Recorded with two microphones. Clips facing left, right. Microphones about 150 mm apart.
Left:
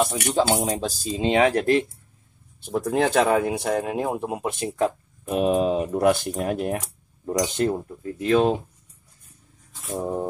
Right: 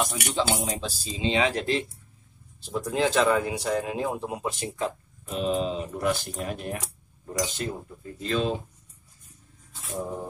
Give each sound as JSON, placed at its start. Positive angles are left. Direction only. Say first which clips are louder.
{"t": 0.1, "sound": "speech", "louder": "left 6 dB", "side_deg": 40}